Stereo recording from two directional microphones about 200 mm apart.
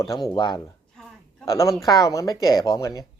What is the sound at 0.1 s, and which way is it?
A woman's voice, 20° left (ahead or behind).